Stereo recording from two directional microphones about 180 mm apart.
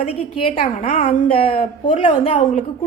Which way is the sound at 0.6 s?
45° left (ahead or behind).